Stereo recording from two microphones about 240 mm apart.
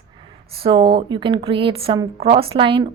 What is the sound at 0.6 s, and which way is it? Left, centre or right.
Speech, right.